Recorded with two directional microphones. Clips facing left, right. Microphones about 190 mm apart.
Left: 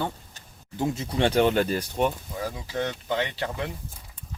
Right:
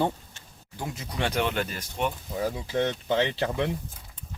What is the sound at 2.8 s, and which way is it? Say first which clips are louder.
Speech: right 2 dB; 30° right (ahead or behind).